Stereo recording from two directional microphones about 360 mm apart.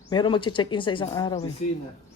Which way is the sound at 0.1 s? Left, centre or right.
Centre.